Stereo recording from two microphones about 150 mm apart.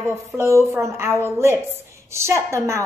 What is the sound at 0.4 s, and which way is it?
A woman's voice, 20° right (ahead or behind).